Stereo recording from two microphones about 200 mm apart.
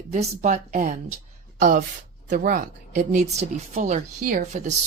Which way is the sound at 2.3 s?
40° right (ahead or behind).